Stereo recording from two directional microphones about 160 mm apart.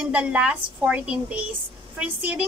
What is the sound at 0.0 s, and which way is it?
A woman's voice, 5° right (ahead or behind).